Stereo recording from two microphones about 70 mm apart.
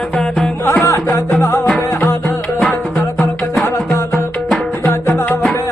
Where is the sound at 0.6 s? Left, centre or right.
Left.